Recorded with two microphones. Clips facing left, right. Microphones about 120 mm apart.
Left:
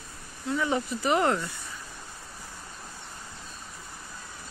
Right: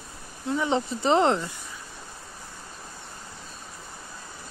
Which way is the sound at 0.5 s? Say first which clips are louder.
Right 2 dB; 25° right (ahead or behind).